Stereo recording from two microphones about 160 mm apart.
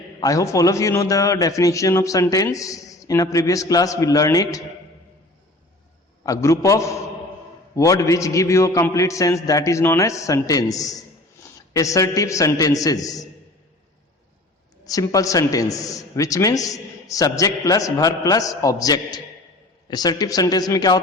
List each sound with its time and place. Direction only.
0.2 s a man's voice: 20° left (ahead or behind)
6.2 s a man's voice: 20° left (ahead or behind)
14.8 s a man's voice: 20° left (ahead or behind)